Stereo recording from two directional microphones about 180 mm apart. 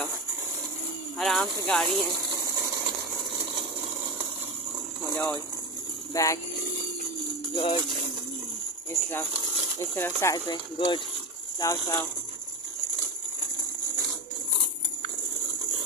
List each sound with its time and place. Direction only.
1.1 s speech: centre (ahead or behind)
5.1 s speech: 5° left (ahead or behind)
6.1 s speech: 15° left (ahead or behind)
7.5 s speech: 30° left (ahead or behind)
9.8 s speech: 15° left (ahead or behind)